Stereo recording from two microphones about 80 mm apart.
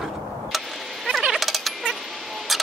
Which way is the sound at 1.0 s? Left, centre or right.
Centre.